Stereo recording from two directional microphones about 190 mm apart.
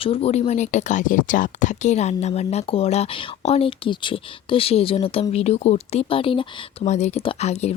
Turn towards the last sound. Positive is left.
turn(degrees=35)  # may be behind; listen again after turning